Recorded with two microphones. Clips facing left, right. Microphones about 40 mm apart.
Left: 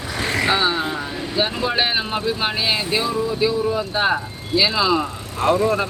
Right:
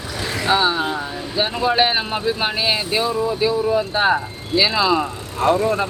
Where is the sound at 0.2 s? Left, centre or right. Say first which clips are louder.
Left 4 dB; left.